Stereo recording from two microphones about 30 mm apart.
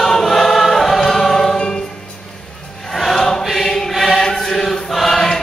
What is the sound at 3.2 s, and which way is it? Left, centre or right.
Choir, left.